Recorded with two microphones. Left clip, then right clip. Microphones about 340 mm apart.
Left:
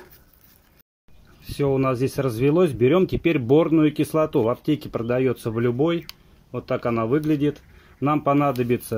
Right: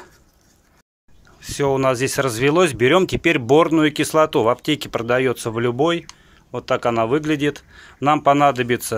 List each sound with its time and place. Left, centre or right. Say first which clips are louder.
1.4 s speech: right 4 dB; right